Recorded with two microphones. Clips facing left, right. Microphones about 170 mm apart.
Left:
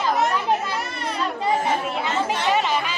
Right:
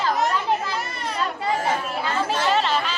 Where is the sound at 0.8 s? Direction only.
Centre (ahead or behind).